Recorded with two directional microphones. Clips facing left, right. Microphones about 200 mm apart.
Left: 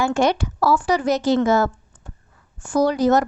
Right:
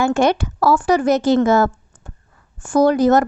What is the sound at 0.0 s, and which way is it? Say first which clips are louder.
Speech: right 3 dB; 55° right (ahead or behind).